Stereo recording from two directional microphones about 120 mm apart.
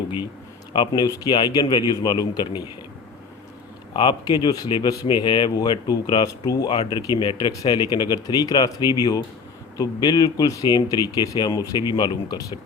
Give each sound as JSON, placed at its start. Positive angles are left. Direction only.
{"t": 0.7, "sound": "speech", "side_deg": 35}
{"t": 3.9, "sound": "speech", "side_deg": 40}